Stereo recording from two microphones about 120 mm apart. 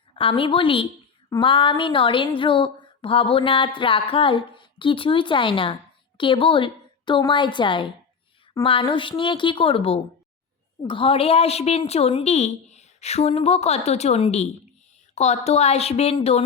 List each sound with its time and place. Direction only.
0.1 s a woman's voice: 45° left (ahead or behind)
1.4 s a sound: 45° left (ahead or behind)
10.8 s a woman's voice: 45° left (ahead or behind)